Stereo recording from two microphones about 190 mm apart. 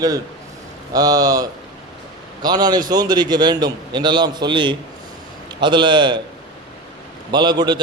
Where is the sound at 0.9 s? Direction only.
20° right (ahead or behind).